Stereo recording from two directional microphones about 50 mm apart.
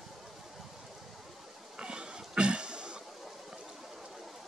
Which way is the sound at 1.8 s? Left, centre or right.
Centre.